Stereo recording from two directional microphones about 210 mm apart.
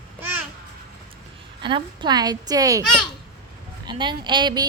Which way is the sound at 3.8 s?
20° right (ahead or behind).